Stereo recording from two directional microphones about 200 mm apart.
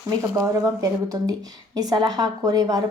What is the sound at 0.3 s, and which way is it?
Speech, 20° right (ahead or behind).